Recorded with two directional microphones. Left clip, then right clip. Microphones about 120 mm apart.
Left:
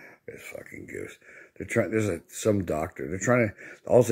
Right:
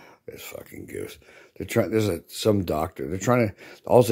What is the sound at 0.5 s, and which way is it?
Speech, 30° right (ahead or behind).